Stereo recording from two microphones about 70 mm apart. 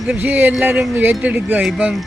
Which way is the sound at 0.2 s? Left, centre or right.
Right.